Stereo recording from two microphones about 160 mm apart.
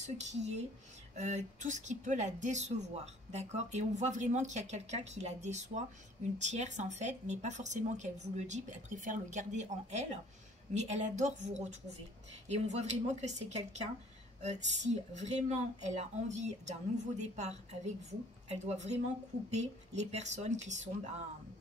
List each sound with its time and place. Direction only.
0.0 s a woman's voice: 45° right (ahead or behind)